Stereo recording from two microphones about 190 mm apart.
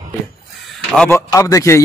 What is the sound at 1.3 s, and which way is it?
Speech, 15° left (ahead or behind).